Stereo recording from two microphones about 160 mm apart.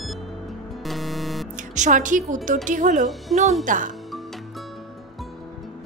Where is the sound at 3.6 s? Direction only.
55° right (ahead or behind).